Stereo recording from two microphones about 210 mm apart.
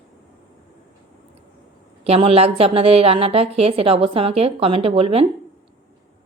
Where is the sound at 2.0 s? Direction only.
25° right (ahead or behind).